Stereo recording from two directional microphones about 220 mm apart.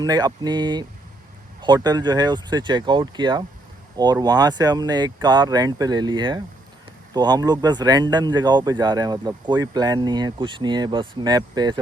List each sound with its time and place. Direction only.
0.0 s speech: 15° right (ahead or behind)